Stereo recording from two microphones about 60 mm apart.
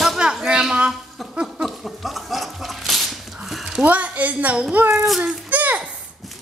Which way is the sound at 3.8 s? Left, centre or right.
Right.